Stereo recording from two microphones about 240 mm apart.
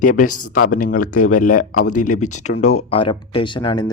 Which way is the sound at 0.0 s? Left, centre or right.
Left.